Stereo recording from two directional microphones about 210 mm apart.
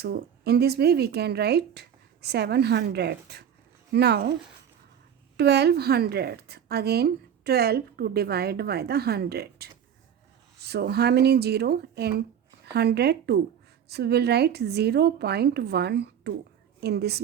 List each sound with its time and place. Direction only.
0.0 s a woman's voice: 50° right (ahead or behind)
5.4 s a woman's voice: 50° right (ahead or behind)